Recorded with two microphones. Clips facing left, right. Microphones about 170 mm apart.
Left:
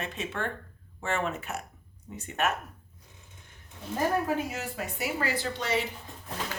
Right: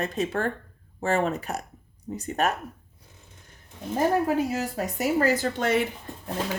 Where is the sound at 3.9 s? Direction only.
35° right (ahead or behind).